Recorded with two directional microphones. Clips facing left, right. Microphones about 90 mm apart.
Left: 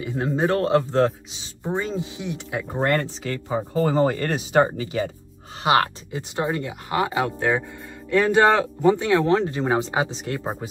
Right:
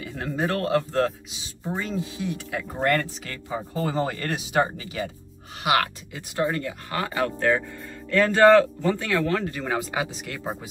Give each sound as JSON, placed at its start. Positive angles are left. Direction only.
{"t": 0.0, "sound": "speech", "side_deg": 25}